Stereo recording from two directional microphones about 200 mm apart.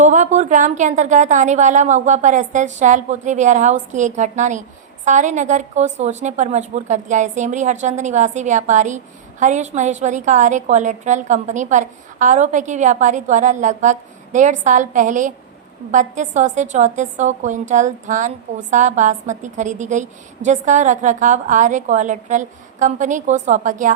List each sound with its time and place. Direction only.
0.0 s a woman's voice: 35° right (ahead or behind)